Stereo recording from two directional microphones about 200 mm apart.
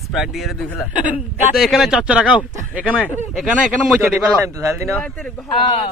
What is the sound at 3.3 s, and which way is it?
Speech, centre (ahead or behind).